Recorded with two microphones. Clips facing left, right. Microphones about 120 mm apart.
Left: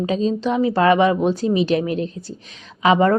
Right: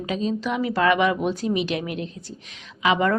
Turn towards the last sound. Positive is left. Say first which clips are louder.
# left 5 dB
turn(degrees=35)  # may be behind; listen again after turning